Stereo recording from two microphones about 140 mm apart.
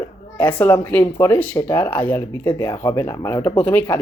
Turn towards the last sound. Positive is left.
turn(degrees=10)  # may be behind; listen again after turning